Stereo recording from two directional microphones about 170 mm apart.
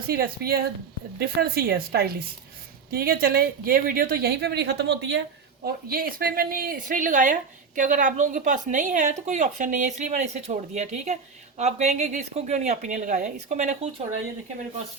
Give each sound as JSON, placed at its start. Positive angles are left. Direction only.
{"t": 0.1, "sound": "a woman's voice", "side_deg": -65}
{"t": 5.6, "sound": "a woman's voice", "side_deg": -60}